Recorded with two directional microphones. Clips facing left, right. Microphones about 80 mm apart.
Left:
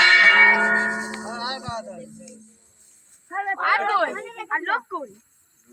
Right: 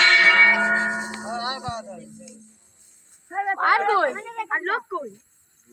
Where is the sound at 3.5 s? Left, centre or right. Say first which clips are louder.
Right 2 dB; right.